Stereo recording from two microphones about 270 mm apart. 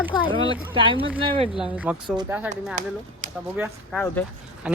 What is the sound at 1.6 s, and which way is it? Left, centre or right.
Speech, centre.